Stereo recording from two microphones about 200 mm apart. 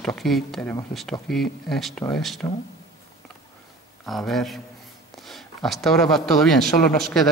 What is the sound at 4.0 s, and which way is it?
A man's voice, centre (ahead or behind).